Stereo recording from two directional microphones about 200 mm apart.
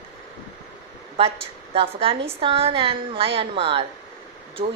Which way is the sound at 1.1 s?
30° right (ahead or behind).